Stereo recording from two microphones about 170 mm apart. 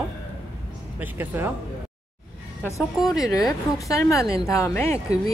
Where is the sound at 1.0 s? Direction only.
10° right (ahead or behind).